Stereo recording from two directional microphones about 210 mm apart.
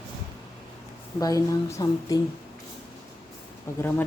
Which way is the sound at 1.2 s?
15° left (ahead or behind).